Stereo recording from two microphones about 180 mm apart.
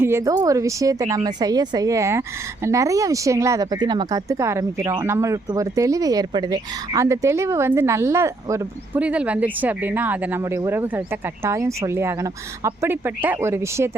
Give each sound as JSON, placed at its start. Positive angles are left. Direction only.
{"t": 0.0, "sound": "speech", "side_deg": -15}